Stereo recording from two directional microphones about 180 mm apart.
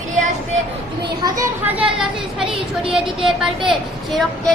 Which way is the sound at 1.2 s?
20° right (ahead or behind).